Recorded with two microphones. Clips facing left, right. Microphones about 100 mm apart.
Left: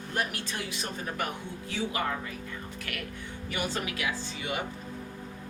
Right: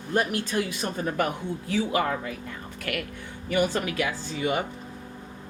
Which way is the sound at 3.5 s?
45° right (ahead or behind).